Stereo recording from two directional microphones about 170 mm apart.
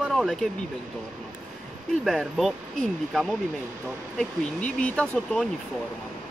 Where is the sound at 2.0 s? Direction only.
Centre (ahead or behind).